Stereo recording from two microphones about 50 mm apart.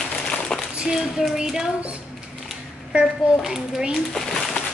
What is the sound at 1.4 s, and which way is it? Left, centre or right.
Speech, centre.